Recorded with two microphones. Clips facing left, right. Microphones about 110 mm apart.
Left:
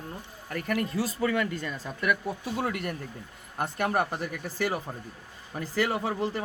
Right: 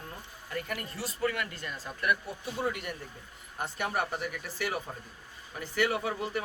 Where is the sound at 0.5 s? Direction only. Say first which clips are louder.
Left 7 dB; 75° left (ahead or behind).